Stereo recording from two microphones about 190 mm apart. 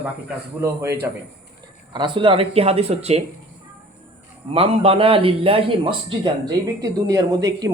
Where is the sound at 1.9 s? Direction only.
25° right (ahead or behind).